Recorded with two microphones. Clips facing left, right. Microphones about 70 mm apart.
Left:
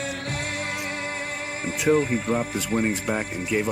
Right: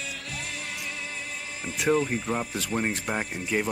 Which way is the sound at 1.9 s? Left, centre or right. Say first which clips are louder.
Left 4 dB; left.